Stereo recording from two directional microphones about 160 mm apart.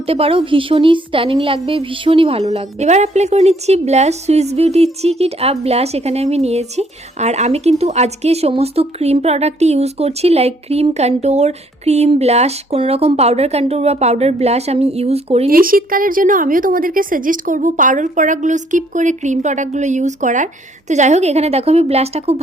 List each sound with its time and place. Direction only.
0.0 s a woman's voice: 35° right (ahead or behind)
15.4 s a woman's voice: 65° right (ahead or behind); by 22.4 s 40° right (ahead or behind)